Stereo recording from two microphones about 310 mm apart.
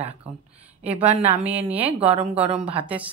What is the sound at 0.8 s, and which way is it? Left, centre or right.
A woman's voice, centre.